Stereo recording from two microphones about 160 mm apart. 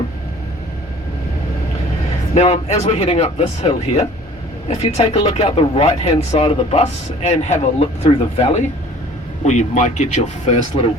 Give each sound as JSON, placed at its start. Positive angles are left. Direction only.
{"t": 2.3, "sound": "speech", "side_deg": 45}